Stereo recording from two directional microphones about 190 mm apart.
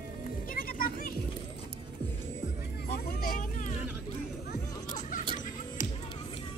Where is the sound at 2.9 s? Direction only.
45° left (ahead or behind).